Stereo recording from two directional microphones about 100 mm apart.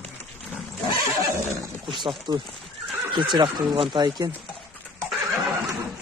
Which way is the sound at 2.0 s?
45° right (ahead or behind).